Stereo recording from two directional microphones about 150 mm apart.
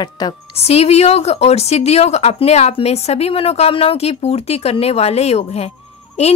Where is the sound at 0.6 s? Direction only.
45° left (ahead or behind).